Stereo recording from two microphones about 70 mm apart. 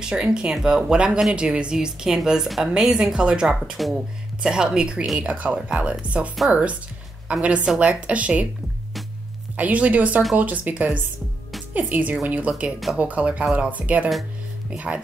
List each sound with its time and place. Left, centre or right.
0.0 s a woman's voice: centre
7.4 s a woman's voice: centre
9.6 s a woman's voice: right